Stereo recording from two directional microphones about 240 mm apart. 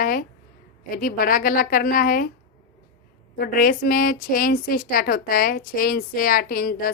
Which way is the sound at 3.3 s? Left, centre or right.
Left.